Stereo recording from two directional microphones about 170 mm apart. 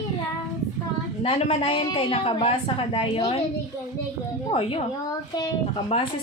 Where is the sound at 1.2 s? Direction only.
35° left (ahead or behind).